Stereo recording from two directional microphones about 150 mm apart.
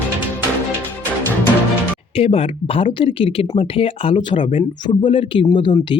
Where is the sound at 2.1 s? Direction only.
40° left (ahead or behind).